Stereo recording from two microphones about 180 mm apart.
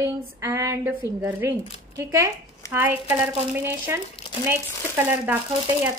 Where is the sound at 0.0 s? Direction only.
15° right (ahead or behind).